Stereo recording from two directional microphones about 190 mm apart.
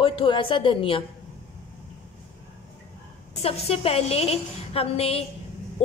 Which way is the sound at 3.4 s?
30° left (ahead or behind).